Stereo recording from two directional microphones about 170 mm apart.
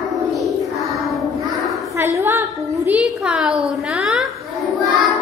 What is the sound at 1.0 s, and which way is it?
Child singing, centre (ahead or behind).